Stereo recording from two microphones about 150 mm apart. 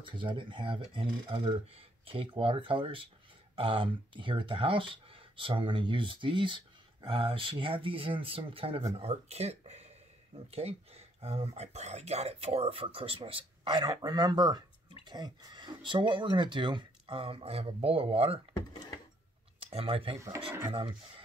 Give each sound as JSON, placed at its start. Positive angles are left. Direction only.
{"t": 0.0, "sound": "speech", "side_deg": -35}
{"t": 19.7, "sound": "speech", "side_deg": -40}
{"t": 20.3, "sound": "speech", "side_deg": -15}